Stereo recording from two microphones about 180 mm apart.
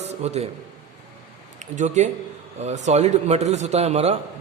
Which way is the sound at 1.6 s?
40° right (ahead or behind).